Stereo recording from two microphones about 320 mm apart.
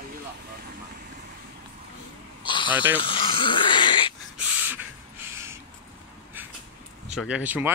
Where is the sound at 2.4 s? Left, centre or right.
Centre.